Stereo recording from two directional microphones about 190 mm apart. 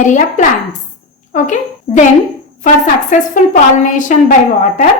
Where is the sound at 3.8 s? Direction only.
40° left (ahead or behind).